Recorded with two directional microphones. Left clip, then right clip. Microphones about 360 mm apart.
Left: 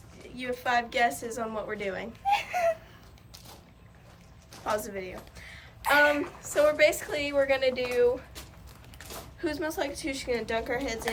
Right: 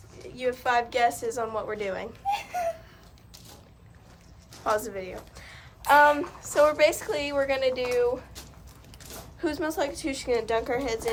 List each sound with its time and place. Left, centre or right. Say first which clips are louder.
0.3 s a woman's voice: right 3 dB; centre
2.2 s a sound: left 3 dB; left
3.3 s boat: even; centre
4.6 s a woman's voice: right 4 dB; centre
9.4 s a woman's voice: right 3 dB; centre